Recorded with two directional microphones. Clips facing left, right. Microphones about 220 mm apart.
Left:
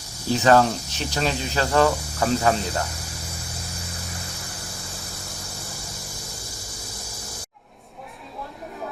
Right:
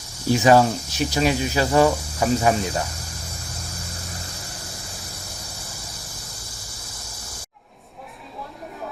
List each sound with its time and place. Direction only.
0.3 s speech: 10° right (ahead or behind)